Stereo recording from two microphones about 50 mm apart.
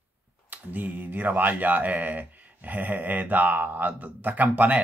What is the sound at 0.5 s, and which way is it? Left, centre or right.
Speech, right.